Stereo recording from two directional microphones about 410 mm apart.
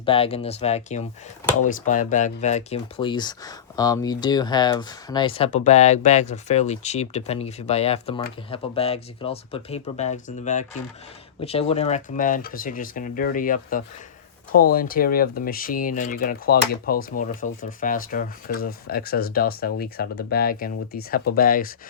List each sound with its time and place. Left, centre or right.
0.0 s speech: centre